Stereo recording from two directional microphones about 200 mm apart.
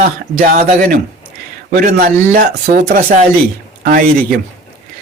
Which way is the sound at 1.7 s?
50° right (ahead or behind).